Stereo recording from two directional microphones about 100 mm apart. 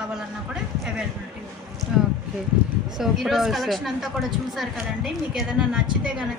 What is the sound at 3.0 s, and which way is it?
Speech, centre (ahead or behind).